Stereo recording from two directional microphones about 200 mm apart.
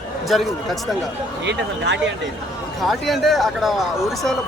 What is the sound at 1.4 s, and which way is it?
Speech, 60° right (ahead or behind).